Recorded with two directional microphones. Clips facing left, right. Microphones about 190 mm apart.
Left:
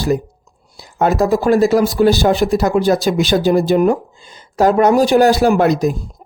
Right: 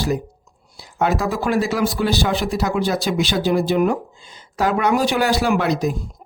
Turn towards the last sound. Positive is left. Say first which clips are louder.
# left 6 dB
turn(degrees=45)  # may be behind; listen again after turning